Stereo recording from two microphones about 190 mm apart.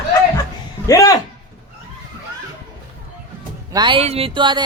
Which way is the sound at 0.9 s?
20° left (ahead or behind).